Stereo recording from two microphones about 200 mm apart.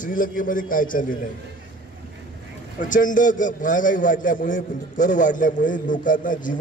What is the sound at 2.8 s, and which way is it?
A man's voice, 40° left (ahead or behind).